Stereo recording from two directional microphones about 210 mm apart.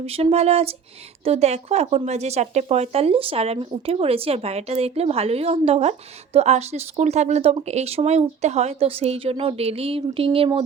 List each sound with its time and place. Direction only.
0.0 s speech: 30° right (ahead or behind)